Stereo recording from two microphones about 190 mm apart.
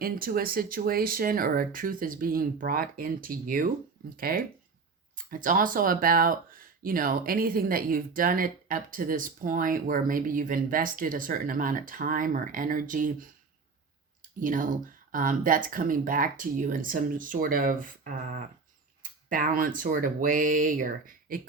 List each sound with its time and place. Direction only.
0.0 s speech: 50° right (ahead or behind)